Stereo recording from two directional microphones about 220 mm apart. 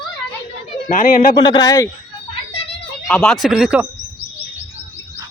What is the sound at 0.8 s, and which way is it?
Speech, 40° left (ahead or behind).